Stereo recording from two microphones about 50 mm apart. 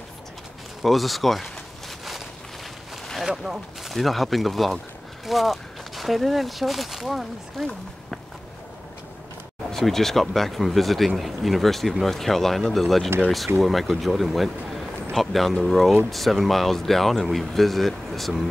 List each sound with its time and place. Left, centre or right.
0.8 s speech: centre
3.3 s speech: centre
3.9 s speech: centre
9.7 s speech: centre